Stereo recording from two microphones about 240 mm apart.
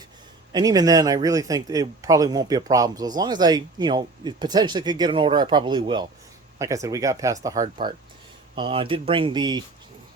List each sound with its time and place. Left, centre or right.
0.5 s speech: centre